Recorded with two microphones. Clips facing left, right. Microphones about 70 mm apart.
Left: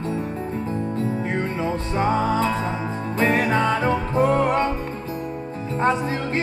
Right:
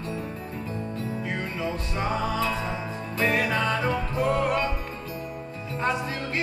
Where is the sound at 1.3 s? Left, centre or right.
Left.